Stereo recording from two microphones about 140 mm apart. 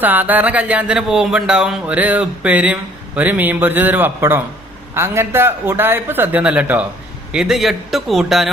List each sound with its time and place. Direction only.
0.0 s a man's voice: 10° right (ahead or behind)